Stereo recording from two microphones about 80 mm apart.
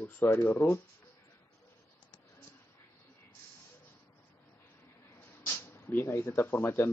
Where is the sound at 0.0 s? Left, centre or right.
Left.